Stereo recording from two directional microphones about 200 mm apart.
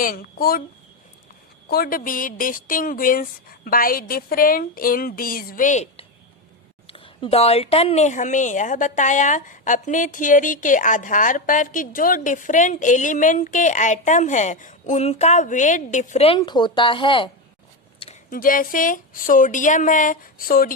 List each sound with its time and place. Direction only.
0.0 s speech: 45° left (ahead or behind)
1.6 s a woman's voice: 50° left (ahead or behind); by 17.3 s 25° left (ahead or behind)
18.0 s speech: 40° left (ahead or behind)